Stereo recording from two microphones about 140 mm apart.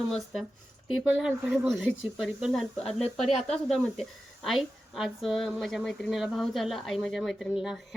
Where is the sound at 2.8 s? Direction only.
50° left (ahead or behind).